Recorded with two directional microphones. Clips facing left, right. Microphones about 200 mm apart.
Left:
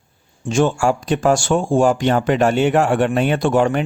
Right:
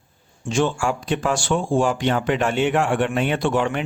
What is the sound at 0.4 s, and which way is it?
Speech, 45° left (ahead or behind).